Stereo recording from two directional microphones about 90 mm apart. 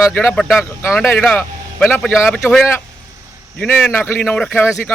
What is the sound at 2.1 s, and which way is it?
Speech, 5° right (ahead or behind).